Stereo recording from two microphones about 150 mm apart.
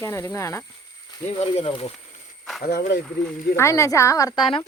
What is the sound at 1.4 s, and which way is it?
Speech, 40° left (ahead or behind).